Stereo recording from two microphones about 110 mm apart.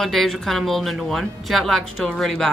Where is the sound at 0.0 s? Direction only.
Centre (ahead or behind).